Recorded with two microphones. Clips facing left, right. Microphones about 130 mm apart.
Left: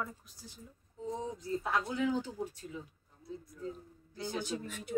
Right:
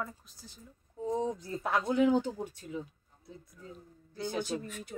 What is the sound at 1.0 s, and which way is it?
Speech, 60° right (ahead or behind).